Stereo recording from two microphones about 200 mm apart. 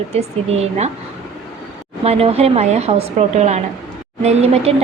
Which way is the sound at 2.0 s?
30° right (ahead or behind).